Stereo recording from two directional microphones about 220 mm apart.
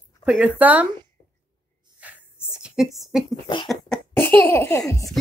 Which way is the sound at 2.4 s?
5° right (ahead or behind).